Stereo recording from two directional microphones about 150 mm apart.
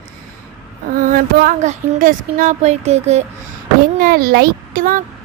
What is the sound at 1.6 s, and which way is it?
Speech, 55° right (ahead or behind).